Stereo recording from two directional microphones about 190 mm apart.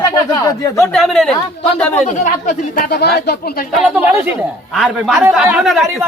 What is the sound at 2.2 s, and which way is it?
Speech, 45° left (ahead or behind).